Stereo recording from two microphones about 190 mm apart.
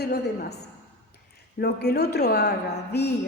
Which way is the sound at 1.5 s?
55° left (ahead or behind).